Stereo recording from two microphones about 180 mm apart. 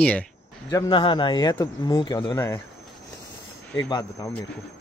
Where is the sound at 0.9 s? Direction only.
30° left (ahead or behind).